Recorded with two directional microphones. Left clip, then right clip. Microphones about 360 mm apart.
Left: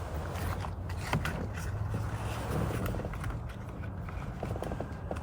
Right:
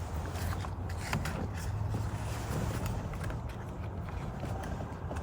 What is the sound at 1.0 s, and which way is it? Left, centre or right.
Vehicle, centre.